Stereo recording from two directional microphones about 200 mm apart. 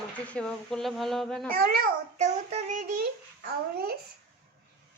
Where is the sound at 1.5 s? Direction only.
50° right (ahead or behind).